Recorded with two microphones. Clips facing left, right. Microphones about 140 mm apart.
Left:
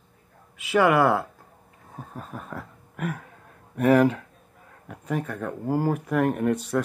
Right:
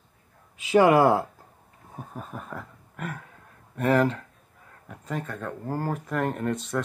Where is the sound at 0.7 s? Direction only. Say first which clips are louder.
Right 2 dB; 30° right (ahead or behind).